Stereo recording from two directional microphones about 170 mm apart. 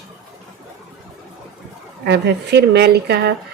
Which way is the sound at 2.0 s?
80° right.